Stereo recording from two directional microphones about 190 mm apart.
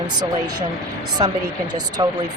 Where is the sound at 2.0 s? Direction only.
25° right (ahead or behind).